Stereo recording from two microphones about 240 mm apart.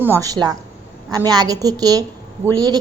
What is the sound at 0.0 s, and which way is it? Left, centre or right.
A woman's voice, centre.